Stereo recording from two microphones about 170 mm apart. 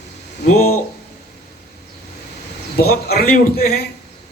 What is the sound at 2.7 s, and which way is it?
Speech, 65° left (ahead or behind).